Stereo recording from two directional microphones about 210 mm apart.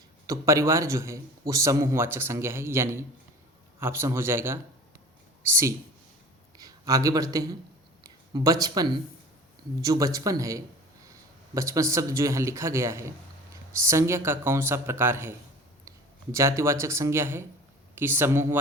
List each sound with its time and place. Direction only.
0.3 s speech: 15° right (ahead or behind)
6.6 s speech: 15° right (ahead or behind)
8.0 s a sound: 15° right (ahead or behind)
8.6 s speech: 20° right (ahead or behind)